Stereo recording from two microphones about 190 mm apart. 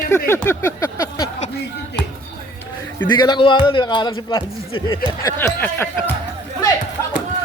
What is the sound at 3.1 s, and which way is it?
Speech, 25° left (ahead or behind).